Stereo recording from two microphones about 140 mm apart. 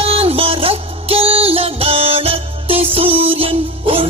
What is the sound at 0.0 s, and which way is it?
Music, 45° right (ahead or behind).